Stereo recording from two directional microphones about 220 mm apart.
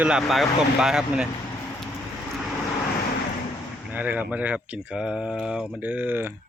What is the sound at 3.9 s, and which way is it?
Speech, 5° right (ahead or behind).